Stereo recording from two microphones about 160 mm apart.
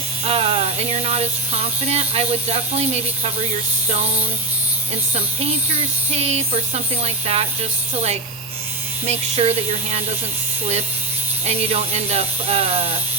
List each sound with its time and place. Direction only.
0.3 s speech: 40° right (ahead or behind)
3.8 s a sound: 45° right (ahead or behind)
5.1 s speech: 40° right (ahead or behind)
11.4 s speech: 40° right (ahead or behind)